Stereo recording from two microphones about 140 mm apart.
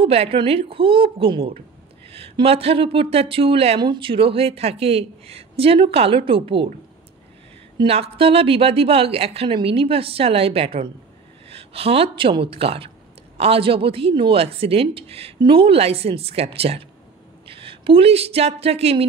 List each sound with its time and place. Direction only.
0.0 s speech: 45° right (ahead or behind)
7.7 s speech: 40° right (ahead or behind)